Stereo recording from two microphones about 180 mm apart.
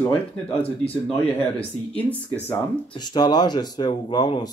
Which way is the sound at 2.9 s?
25° left (ahead or behind).